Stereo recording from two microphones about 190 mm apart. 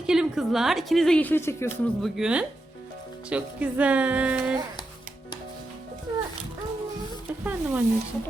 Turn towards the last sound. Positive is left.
turn(degrees=-10)  # may be behind; listen again after turning